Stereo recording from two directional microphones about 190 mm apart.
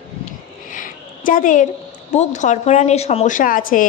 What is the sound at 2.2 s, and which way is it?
A woman's voice, 40° left (ahead or behind).